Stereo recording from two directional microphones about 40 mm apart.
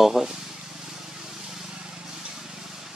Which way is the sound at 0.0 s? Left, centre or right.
Centre.